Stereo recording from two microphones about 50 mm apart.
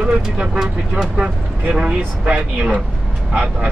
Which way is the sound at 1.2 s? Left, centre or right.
Centre.